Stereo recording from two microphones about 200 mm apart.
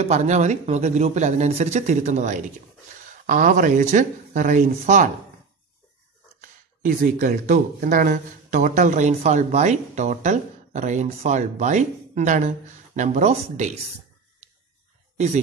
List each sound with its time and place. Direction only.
0.0 s speech: 35° right (ahead or behind)
6.8 s speech: 40° right (ahead or behind)